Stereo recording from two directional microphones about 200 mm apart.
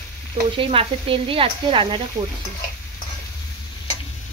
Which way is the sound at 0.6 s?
25° right (ahead or behind).